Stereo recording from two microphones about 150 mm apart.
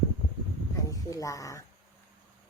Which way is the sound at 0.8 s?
20° left (ahead or behind).